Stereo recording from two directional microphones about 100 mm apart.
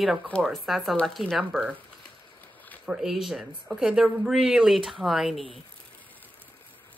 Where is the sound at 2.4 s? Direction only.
15° left (ahead or behind).